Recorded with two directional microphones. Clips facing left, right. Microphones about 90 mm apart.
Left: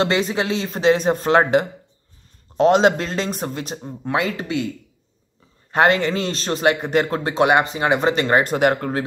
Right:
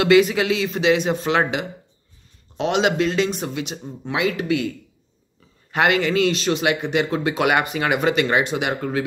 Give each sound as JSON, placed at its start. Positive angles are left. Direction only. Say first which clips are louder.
{"t": 0.0, "sound": "a man's voice", "louder": "right 4 dB", "side_deg": 30}
{"t": 5.7, "sound": "a man's voice", "louder": "left 2 dB", "side_deg": 35}